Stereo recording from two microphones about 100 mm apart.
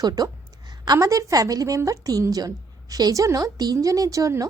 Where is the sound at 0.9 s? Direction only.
35° right (ahead or behind).